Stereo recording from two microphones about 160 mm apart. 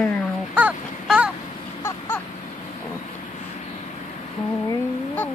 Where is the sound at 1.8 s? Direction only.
15° left (ahead or behind).